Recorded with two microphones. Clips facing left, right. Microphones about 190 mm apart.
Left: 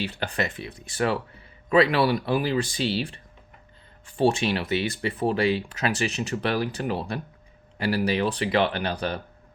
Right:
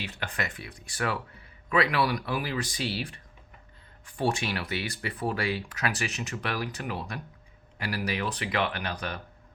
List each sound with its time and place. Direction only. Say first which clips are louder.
0.0 s speech: left 7 dB; 30° left (ahead or behind)